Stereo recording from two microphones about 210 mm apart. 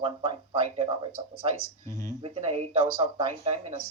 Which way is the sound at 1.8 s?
15° left (ahead or behind).